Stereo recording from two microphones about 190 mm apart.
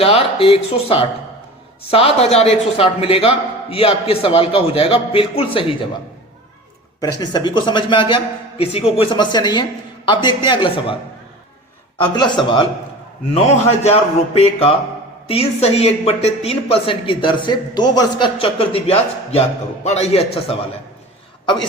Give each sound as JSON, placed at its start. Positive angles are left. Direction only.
{"t": 0.0, "sound": "speech", "side_deg": 30}
{"t": 7.0, "sound": "speech", "side_deg": 20}
{"t": 11.9, "sound": "a man's voice", "side_deg": 25}
{"t": 13.3, "sound": "a man's voice", "side_deg": 35}